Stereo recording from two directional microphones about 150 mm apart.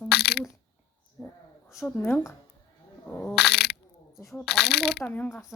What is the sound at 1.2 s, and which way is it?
Speech, 15° left (ahead or behind).